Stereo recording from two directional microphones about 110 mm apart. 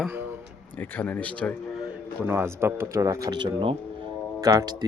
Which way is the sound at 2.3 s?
20° right (ahead or behind).